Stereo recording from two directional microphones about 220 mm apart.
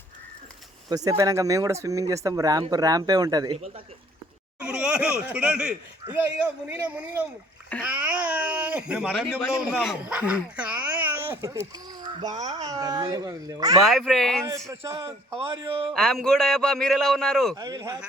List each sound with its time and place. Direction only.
0.9 s speech: 15° right (ahead or behind)
4.6 s speech: 5° right (ahead or behind)
12.3 s speech: 30° right (ahead or behind)
12.6 s speech: 15° right (ahead or behind)
13.8 s speech: centre (ahead or behind)
14.7 s speech: 15° right (ahead or behind)
15.9 s speech: centre (ahead or behind)
17.5 s speech: 15° right (ahead or behind)